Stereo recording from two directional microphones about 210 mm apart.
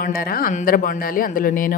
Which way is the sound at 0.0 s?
45° left (ahead or behind).